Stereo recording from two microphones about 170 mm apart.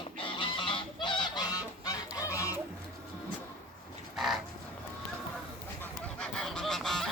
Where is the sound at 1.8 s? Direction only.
20° left (ahead or behind).